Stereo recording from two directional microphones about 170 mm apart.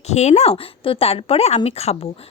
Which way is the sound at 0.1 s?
40° left (ahead or behind).